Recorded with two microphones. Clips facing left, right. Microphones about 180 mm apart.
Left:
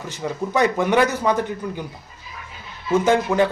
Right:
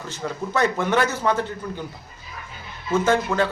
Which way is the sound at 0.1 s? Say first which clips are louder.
Left 3 dB; 15° left (ahead or behind).